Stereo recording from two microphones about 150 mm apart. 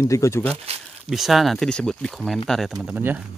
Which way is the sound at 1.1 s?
Centre (ahead or behind).